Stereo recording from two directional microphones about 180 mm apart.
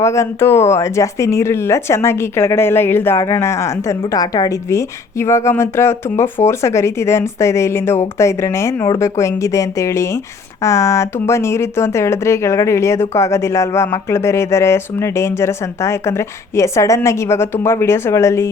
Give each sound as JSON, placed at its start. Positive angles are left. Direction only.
{"t": 0.0, "sound": "speech", "side_deg": 15}